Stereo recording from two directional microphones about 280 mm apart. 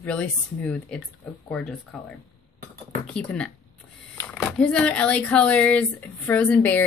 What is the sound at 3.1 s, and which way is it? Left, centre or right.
Speech, centre.